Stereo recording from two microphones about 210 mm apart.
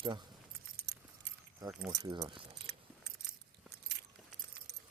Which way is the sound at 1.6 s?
15° right (ahead or behind).